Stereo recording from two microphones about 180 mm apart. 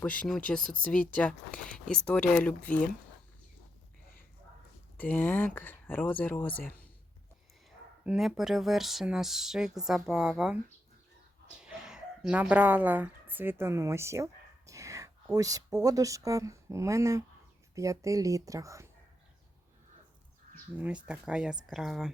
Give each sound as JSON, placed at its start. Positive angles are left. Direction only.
{"t": 0.0, "sound": "speech", "side_deg": 5}
{"t": 4.9, "sound": "speech", "side_deg": 10}
{"t": 8.0, "sound": "speech", "side_deg": -5}
{"t": 11.6, "sound": "speech", "side_deg": -5}
{"t": 20.7, "sound": "speech", "side_deg": -10}